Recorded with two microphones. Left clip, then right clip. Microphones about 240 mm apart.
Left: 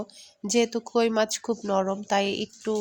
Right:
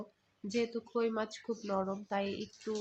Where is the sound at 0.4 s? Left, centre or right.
Left.